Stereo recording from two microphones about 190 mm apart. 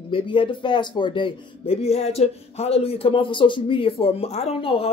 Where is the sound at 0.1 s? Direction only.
25° left (ahead or behind).